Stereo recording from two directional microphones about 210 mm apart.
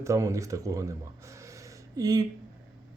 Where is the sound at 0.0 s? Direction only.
15° right (ahead or behind).